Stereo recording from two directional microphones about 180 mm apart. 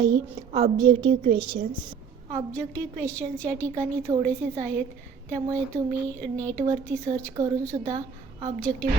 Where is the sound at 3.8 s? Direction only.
15° right (ahead or behind).